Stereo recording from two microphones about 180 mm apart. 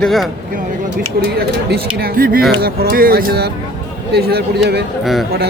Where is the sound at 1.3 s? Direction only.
60° right (ahead or behind).